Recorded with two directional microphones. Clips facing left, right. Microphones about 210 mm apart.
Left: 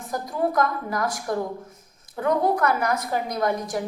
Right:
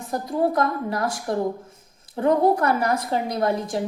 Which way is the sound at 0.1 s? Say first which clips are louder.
Right 3 dB; 30° right (ahead or behind).